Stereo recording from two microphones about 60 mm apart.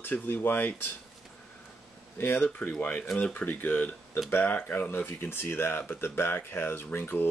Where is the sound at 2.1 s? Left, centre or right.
Left.